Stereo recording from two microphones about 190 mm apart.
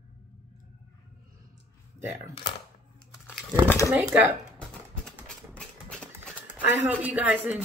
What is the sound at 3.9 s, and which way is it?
Speech, 10° right (ahead or behind).